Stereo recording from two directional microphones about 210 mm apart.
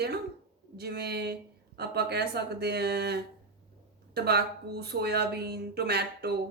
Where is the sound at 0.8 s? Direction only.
50° right (ahead or behind).